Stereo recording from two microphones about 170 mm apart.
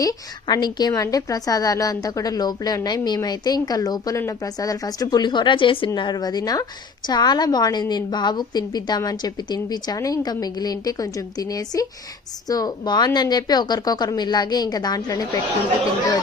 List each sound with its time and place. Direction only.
0.0 s a woman's voice: 20° left (ahead or behind)